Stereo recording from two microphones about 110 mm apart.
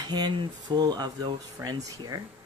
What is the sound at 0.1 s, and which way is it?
Speech, 40° right (ahead or behind).